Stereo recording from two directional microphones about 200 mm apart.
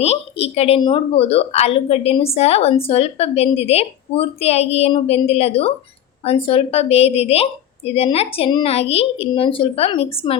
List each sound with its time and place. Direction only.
0.0 s a woman's voice: 30° left (ahead or behind)